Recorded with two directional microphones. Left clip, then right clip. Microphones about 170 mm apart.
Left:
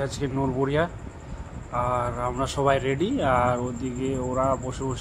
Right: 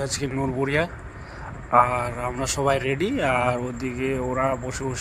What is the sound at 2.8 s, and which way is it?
Speech, 35° right (ahead or behind).